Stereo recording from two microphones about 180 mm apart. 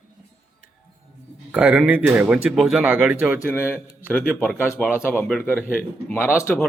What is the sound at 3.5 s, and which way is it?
Speech, 15° left (ahead or behind).